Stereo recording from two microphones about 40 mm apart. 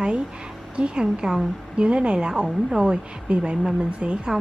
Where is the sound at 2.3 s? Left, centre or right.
Centre.